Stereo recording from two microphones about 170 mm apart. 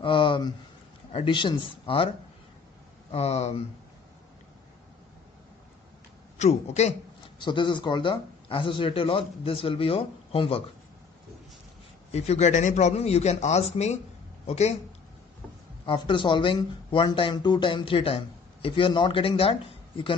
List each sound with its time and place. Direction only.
0.0 s speech: 30° left (ahead or behind)
3.1 s speech: 40° left (ahead or behind)
6.3 s speech: 40° left (ahead or behind)
7.3 s speech: 30° left (ahead or behind)
12.1 s speech: 40° left (ahead or behind)
15.8 s speech: 30° left (ahead or behind)